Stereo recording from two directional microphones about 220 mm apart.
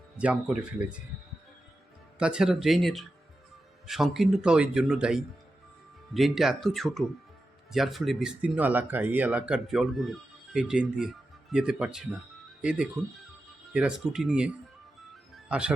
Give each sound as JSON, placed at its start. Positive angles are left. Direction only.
{"t": 0.2, "sound": "speech", "side_deg": -5}
{"t": 2.1, "sound": "speech", "side_deg": -5}